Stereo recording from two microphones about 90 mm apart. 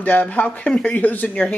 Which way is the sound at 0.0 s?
20° left (ahead or behind).